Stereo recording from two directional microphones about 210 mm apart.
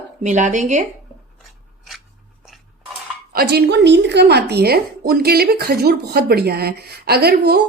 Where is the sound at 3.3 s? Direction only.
55° right (ahead or behind).